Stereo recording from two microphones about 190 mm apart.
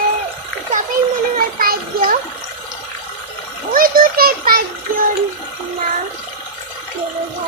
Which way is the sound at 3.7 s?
50° right (ahead or behind).